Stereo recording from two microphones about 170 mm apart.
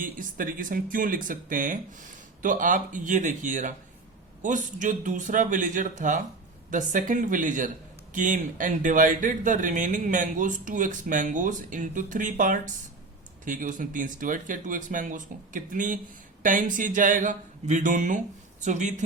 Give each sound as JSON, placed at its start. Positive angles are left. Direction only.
{"t": 0.0, "sound": "speech", "side_deg": -55}